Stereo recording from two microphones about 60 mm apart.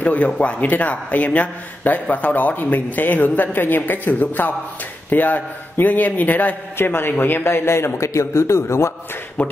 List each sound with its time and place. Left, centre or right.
0.0 s a man's voice: left
6.8 s a man's voice: left
9.4 s speech: left